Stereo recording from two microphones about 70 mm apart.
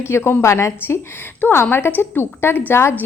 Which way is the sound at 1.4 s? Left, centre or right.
Left.